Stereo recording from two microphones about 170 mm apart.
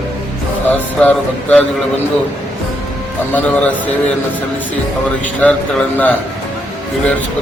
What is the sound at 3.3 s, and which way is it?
Speech, 10° left (ahead or behind).